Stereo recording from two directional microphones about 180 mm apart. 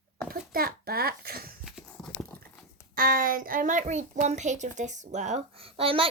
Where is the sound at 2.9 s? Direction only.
55° right (ahead or behind); by 6.1 s 30° right (ahead or behind).